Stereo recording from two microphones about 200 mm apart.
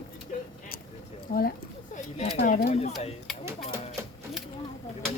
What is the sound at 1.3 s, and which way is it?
Speech, 45° left (ahead or behind).